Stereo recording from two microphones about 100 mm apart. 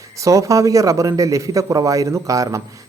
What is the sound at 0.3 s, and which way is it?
A man's voice, 35° right (ahead or behind).